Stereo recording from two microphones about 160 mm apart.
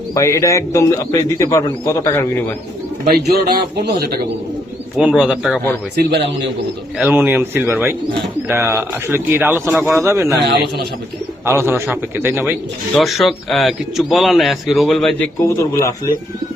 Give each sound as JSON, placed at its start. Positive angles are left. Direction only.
{"t": 0.1, "sound": "a man's voice", "side_deg": 20}
{"t": 3.1, "sound": "speech", "side_deg": -80}
{"t": 4.9, "sound": "a man's voice", "side_deg": -5}
{"t": 6.0, "sound": "a man's voice", "side_deg": -90}
{"t": 7.0, "sound": "speech", "side_deg": -10}
{"t": 11.4, "sound": "speech", "side_deg": -15}
{"t": 13.0, "sound": "a man's voice", "side_deg": 0}
{"t": 15.4, "sound": "a man's voice", "side_deg": 15}